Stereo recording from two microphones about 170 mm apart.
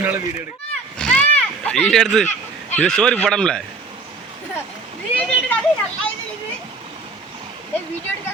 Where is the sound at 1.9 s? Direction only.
Centre (ahead or behind).